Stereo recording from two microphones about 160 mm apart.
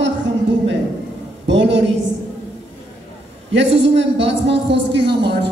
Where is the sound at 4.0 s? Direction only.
90° right.